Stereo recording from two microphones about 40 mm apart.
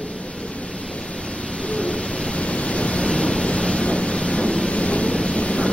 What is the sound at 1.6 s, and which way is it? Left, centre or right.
Hoot, left.